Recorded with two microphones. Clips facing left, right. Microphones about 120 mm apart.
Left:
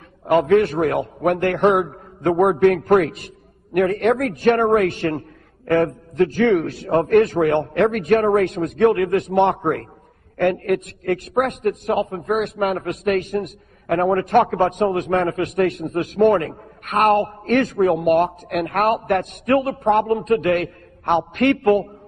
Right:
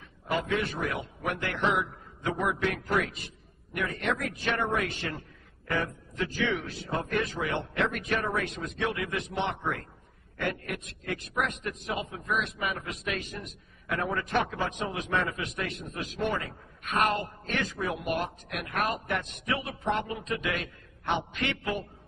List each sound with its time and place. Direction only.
0.2 s a man's voice: 55° left (ahead or behind)